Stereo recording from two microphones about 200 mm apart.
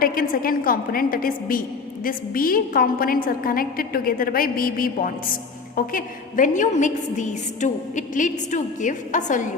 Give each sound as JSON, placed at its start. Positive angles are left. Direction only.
{"t": 0.0, "sound": "a woman's voice", "side_deg": 45}